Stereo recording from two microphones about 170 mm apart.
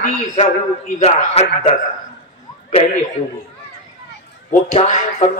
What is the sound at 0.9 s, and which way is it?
Speech, 40° left (ahead or behind).